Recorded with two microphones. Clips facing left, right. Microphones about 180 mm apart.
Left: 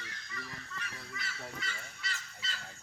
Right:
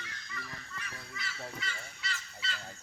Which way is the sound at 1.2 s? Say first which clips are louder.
Right 2 dB; 50° left (ahead or behind).